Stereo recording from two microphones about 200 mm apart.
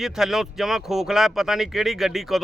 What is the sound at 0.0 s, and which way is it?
Speech, centre (ahead or behind).